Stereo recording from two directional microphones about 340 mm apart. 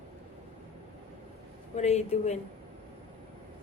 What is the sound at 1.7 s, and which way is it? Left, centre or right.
Child singing, centre.